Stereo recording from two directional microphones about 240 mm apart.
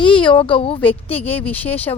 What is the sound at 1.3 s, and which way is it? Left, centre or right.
Speech, centre.